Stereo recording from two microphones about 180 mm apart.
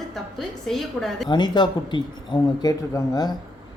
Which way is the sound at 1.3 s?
25° left (ahead or behind).